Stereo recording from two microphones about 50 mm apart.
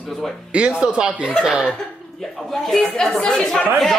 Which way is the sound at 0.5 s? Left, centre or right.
Right.